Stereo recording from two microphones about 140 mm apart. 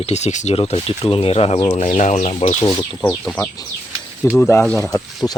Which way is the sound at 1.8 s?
60° left (ahead or behind).